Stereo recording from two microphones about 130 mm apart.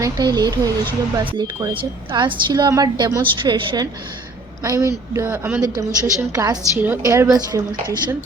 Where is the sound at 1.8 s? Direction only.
35° right (ahead or behind).